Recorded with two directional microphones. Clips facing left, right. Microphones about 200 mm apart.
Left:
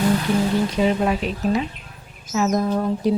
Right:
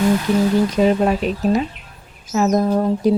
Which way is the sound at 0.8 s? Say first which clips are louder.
Right 4 dB; 45° right (ahead or behind).